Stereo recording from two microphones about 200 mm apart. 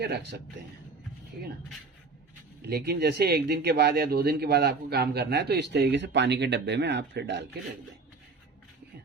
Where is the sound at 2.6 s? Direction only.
55° right (ahead or behind).